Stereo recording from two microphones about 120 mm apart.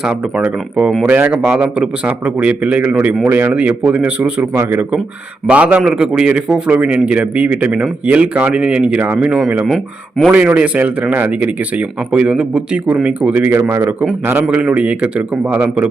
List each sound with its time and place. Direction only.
0.0 s a man's voice: 10° right (ahead or behind)
9.6 s speech: centre (ahead or behind)
10.3 s a man's voice: 10° right (ahead or behind)